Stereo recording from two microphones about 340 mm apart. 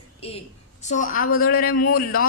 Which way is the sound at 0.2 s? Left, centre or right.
Centre.